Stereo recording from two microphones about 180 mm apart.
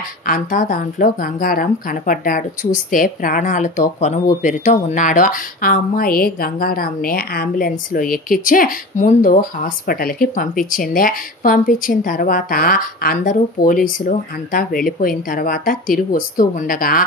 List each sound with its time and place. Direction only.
0.3 s speech: 50° left (ahead or behind)